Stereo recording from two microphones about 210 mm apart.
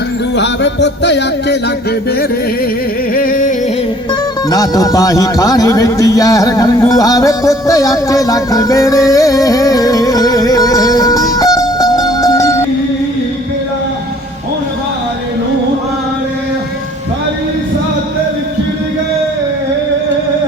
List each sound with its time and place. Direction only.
0.3 s music: 55° left (ahead or behind)
3.2 s music: 40° left (ahead or behind)
4.4 s a man's voice: 15° left (ahead or behind)